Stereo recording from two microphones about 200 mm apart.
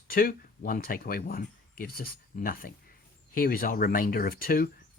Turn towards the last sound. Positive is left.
turn(degrees=45)  # may be behind; listen again after turning